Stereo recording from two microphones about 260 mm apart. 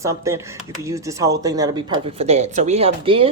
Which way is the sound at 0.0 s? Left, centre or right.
Centre.